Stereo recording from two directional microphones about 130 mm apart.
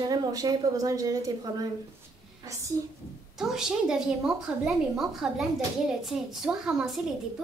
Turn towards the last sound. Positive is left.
turn(degrees=-5)  # may be behind; listen again after turning